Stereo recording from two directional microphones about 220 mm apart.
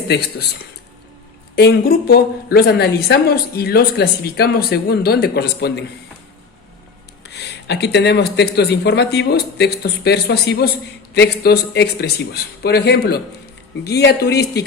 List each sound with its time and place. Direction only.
1.5 s a woman's voice: 45° left (ahead or behind)
7.3 s a woman's voice: 50° left (ahead or behind)